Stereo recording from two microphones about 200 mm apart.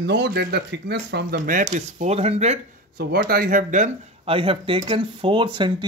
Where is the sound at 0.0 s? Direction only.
60° right (ahead or behind); by 2.6 s 35° right (ahead or behind).